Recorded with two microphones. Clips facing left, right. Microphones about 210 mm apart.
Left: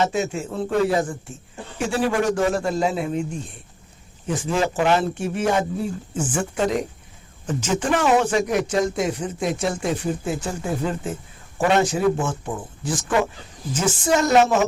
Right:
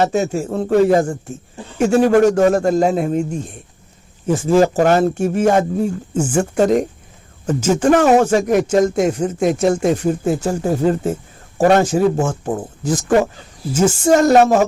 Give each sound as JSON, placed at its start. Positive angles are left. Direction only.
{"t": 0.0, "sound": "speech", "side_deg": -45}